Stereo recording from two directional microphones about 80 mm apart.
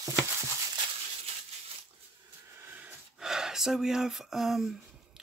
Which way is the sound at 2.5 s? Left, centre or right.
Right.